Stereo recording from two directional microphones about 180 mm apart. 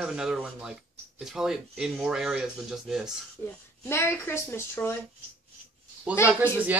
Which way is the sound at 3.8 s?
15° left (ahead or behind).